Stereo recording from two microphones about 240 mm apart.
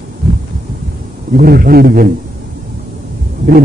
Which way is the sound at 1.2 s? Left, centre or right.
Right.